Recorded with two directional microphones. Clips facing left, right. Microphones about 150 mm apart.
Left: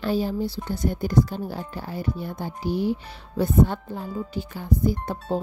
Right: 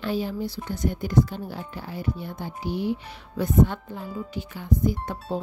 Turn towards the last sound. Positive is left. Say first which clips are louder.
# left 1 dB
turn(degrees=35)  # may be behind; listen again after turning